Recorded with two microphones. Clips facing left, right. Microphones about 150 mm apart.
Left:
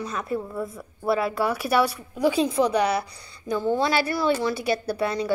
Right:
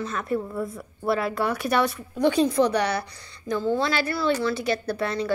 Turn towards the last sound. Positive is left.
turn(degrees=15)  # may be behind; listen again after turning